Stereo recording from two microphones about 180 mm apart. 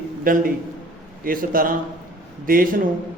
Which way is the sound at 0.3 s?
50° right (ahead or behind).